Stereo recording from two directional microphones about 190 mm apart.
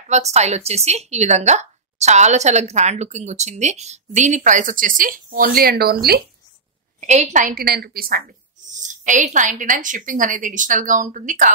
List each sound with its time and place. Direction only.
0.1 s a woman's voice: 35° right (ahead or behind); by 6.2 s 55° right (ahead or behind)
7.0 s a woman's voice: 40° right (ahead or behind)
8.7 s a woman's voice: 40° right (ahead or behind)